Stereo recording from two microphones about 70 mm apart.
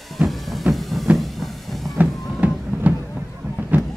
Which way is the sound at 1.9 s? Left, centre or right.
Right.